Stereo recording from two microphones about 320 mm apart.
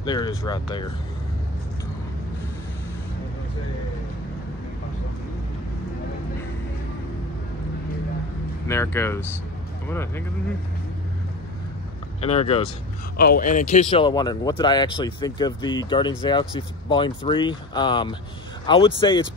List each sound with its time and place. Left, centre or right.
0.0 s speech: centre
8.6 s speech: centre
12.2 s speech: centre